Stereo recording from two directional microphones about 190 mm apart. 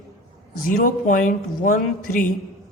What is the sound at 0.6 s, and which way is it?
A man's voice, 45° left (ahead or behind).